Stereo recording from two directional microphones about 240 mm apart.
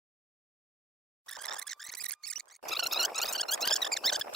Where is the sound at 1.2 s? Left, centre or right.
Centre.